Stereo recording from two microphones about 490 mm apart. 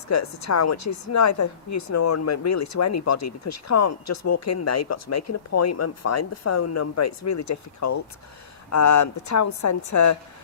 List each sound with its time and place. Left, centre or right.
0.1 s a woman's voice: left